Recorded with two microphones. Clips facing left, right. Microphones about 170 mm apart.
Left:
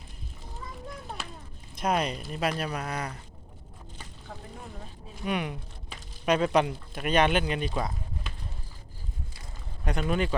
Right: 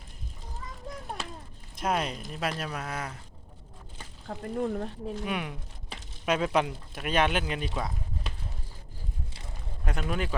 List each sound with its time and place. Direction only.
1.7 s speech: centre (ahead or behind)
4.3 s speech: 60° right (ahead or behind)
5.2 s speech: centre (ahead or behind)
9.8 s speech: centre (ahead or behind)